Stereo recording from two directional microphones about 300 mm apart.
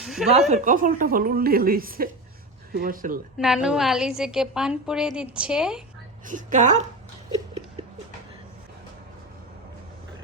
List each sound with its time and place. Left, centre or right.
0.0 s speech: centre
0.5 s speech: right
3.3 s a woman's voice: centre
6.2 s speech: right
7.3 s a sound: centre